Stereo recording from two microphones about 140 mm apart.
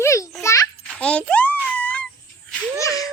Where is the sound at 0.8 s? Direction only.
5° left (ahead or behind).